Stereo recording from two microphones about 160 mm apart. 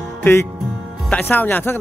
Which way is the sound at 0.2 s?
15° left (ahead or behind).